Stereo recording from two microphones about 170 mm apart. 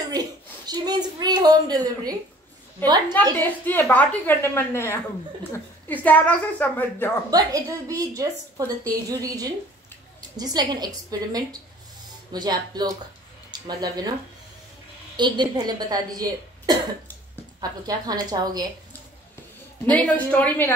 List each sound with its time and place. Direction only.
0.1 s a sound: 25° right (ahead or behind)
3.3 s a woman's voice: 10° left (ahead or behind)
7.2 s speech: 20° right (ahead or behind)
15.1 s speech: 25° right (ahead or behind)
20.1 s a woman's voice: 10° left (ahead or behind)